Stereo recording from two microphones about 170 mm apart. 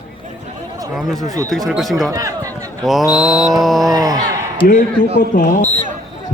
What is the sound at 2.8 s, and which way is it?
A man's voice, centre (ahead or behind).